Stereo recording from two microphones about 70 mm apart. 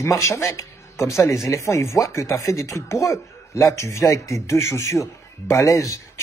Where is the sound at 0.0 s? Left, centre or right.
Left.